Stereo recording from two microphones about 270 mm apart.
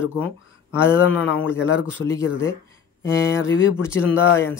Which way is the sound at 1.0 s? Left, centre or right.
Left.